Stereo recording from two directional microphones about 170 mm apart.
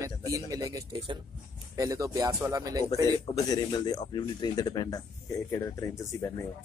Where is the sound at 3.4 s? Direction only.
25° left (ahead or behind).